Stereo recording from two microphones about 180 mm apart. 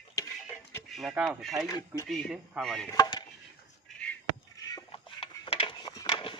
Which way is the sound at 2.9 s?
20° left (ahead or behind).